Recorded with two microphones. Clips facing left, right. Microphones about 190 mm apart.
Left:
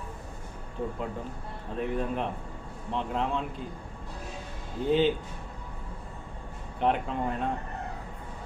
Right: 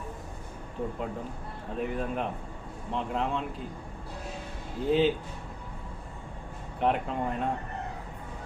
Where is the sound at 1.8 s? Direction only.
Centre (ahead or behind).